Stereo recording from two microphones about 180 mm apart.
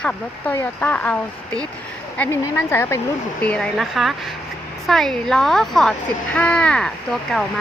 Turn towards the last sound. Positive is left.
turn(degrees=0)  # may be behind; listen again after turning